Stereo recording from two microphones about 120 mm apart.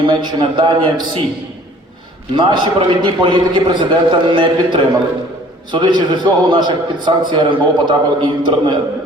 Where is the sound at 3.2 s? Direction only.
45° right (ahead or behind).